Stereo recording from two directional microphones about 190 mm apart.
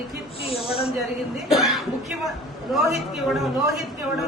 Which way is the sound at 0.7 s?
30° left (ahead or behind).